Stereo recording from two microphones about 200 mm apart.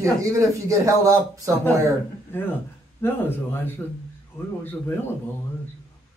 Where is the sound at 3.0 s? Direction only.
10° left (ahead or behind).